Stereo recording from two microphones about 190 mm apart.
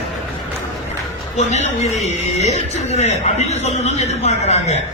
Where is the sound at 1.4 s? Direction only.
35° left (ahead or behind).